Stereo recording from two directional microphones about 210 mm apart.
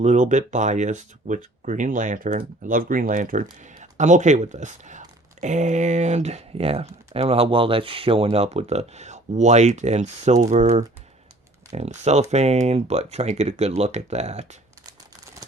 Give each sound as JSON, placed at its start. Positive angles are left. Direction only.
{"t": 0.0, "sound": "speech", "side_deg": -35}